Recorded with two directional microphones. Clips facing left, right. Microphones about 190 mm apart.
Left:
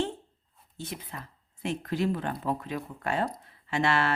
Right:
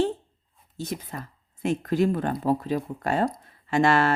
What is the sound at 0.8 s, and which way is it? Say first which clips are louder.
Speech: right 6 dB; 40° right (ahead or behind).